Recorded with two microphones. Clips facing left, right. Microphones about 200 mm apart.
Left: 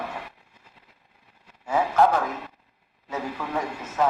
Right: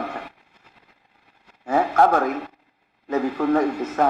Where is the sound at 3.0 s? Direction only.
55° right (ahead or behind).